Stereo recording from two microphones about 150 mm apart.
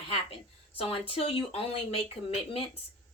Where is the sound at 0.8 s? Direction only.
40° left (ahead or behind).